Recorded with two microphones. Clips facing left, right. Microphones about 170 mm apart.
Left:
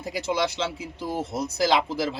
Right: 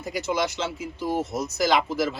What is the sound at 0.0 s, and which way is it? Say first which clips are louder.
Speech: even; 30° left (ahead or behind).